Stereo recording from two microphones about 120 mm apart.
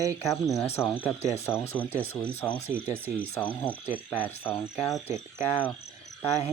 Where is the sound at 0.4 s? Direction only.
25° left (ahead or behind).